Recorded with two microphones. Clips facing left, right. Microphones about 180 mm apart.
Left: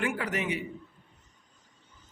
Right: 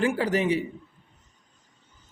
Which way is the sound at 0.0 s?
30° right (ahead or behind).